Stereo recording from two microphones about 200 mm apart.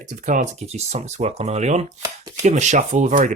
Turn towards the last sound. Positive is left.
turn(degrees=-35)  # may be behind; listen again after turning